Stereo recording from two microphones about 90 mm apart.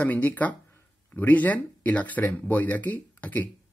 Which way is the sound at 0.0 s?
15° left (ahead or behind).